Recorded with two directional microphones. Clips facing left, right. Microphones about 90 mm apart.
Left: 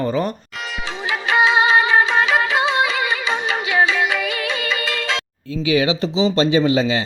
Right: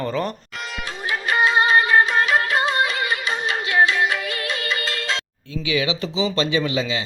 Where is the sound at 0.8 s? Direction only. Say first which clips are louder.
Left 2 dB; 90° left.